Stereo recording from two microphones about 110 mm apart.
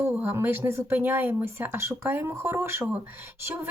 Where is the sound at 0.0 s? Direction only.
20° right (ahead or behind).